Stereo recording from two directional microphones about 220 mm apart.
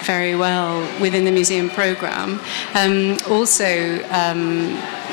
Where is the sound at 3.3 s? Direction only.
25° left (ahead or behind).